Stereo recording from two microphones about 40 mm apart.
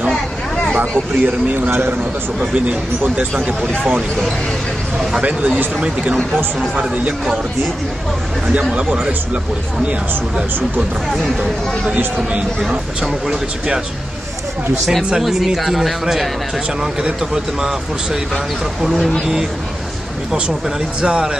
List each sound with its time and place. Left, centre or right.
0.7 s speech: right
1.6 s a man's voice: right
2.5 s speech: right
8.7 s speech: right
12.6 s speech: centre
15.1 s speech: centre
17.0 s speech: centre
18.3 s speech: centre
21.0 s speech: right